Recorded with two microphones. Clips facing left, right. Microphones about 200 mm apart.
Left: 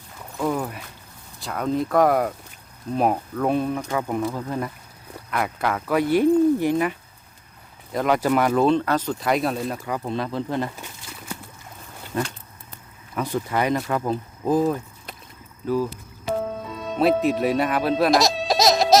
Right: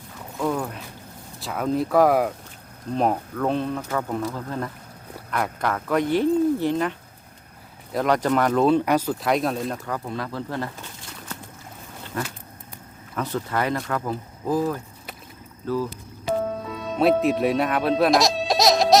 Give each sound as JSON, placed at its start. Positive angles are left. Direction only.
{"t": 0.3, "sound": "a sound", "side_deg": 5}
{"t": 1.4, "sound": "speech", "side_deg": 0}
{"t": 7.9, "sound": "speech", "side_deg": 5}
{"t": 8.7, "sound": "speech", "side_deg": -10}
{"t": 10.1, "sound": "speech", "side_deg": 20}
{"t": 12.1, "sound": "a sound", "side_deg": 25}
{"t": 13.1, "sound": "speech", "side_deg": 15}
{"t": 16.4, "sound": "music", "side_deg": 0}